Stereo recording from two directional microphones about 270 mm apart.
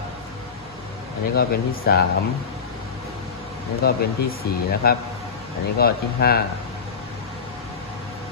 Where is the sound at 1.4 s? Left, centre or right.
Left.